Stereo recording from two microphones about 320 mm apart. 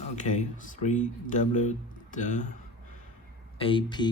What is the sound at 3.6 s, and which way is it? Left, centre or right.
Speech, centre.